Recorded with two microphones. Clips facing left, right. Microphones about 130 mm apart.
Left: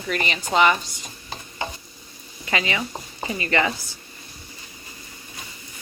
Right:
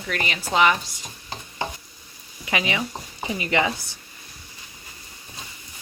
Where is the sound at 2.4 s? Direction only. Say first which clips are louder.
Even; 15° right (ahead or behind).